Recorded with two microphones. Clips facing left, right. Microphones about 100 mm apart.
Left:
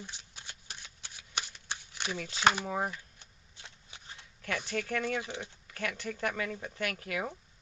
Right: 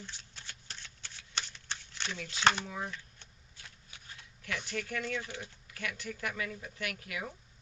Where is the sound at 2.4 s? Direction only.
10° left (ahead or behind).